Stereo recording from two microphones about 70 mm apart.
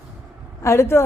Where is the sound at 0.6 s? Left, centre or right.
Left.